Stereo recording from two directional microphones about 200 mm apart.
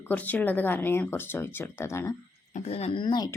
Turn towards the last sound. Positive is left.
turn(degrees=20)  # may be behind; listen again after turning